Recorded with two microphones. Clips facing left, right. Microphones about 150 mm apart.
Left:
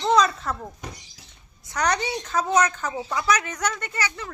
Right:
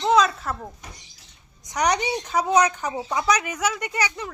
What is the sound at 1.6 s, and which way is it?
Speech, 15° right (ahead or behind).